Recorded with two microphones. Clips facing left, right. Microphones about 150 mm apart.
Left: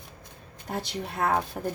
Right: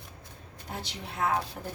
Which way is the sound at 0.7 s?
50° left (ahead or behind).